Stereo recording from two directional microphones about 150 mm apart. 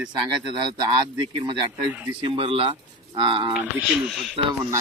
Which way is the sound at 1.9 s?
10° right (ahead or behind).